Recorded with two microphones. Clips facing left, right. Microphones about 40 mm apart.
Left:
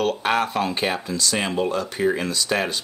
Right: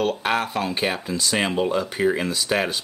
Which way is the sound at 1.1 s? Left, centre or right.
Centre.